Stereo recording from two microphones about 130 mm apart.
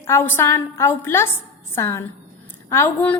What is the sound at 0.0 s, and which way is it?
A woman's voice, 20° left (ahead or behind).